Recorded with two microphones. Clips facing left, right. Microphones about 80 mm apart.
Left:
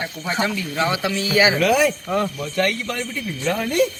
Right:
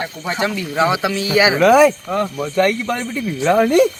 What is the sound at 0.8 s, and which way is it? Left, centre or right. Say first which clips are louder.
Speech: right 5 dB; centre.